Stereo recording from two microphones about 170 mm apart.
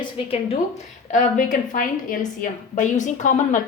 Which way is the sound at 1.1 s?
50° left (ahead or behind).